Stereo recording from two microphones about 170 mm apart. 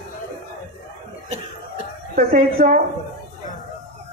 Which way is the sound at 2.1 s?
55° right (ahead or behind).